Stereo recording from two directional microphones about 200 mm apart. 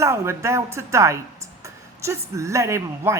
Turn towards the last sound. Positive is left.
turn(degrees=-15)  # may be behind; listen again after turning